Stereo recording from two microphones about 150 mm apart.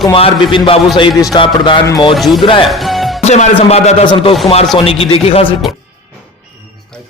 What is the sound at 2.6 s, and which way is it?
Music, centre (ahead or behind).